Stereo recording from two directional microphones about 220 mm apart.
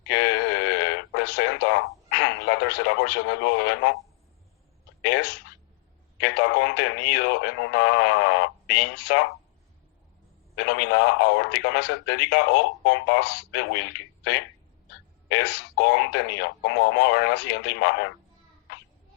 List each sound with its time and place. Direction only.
0.1 s a sound: 50° left (ahead or behind)
2.5 s speech: 50° left (ahead or behind)
5.0 s speech: 50° left (ahead or behind)
10.5 s speech: 50° left (ahead or behind)